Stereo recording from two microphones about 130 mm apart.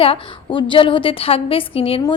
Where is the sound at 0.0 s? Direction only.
45° left (ahead or behind).